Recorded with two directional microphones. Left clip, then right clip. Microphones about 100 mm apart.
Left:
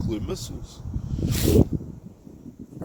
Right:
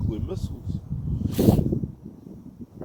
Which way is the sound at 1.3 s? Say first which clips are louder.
Right 2 dB; 55° left (ahead or behind).